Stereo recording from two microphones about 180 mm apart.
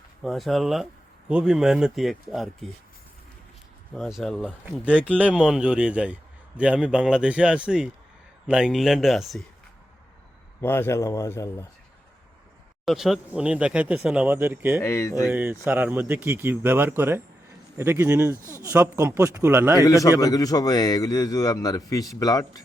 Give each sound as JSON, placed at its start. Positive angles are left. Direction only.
{"t": 0.2, "sound": "speech", "side_deg": 0}
{"t": 3.9, "sound": "speech", "side_deg": 0}
{"t": 10.6, "sound": "speech", "side_deg": 10}
{"t": 12.8, "sound": "speech", "side_deg": 0}
{"t": 14.8, "sound": "speech", "side_deg": 15}
{"t": 15.3, "sound": "speech", "side_deg": -10}
{"t": 19.8, "sound": "a man's voice", "side_deg": 20}